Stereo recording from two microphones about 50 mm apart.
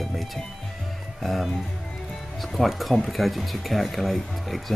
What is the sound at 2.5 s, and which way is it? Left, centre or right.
Speech, centre.